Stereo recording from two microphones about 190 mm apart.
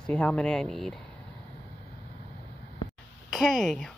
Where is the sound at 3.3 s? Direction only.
Centre (ahead or behind).